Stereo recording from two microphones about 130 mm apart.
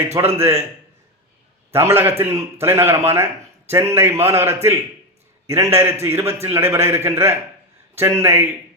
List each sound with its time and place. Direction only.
0.2 s a man's voice: 20° right (ahead or behind)
1.7 s a man's voice: 20° right (ahead or behind)